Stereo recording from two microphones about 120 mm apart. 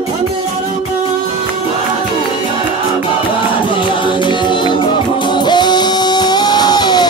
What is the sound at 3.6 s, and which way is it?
Music, 45° left (ahead or behind).